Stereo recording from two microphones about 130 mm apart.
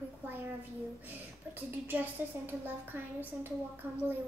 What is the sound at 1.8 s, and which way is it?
A woman's voice, 15° right (ahead or behind).